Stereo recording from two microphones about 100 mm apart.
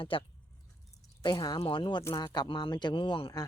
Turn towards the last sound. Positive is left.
turn(degrees=55)  # may be behind; listen again after turning